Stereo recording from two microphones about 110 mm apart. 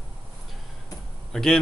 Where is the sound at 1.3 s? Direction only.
5° left (ahead or behind).